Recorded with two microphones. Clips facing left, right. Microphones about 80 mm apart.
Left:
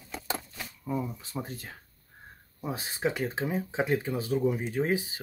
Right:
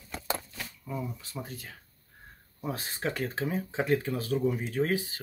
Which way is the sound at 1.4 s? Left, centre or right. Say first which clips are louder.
Left 2 dB; left.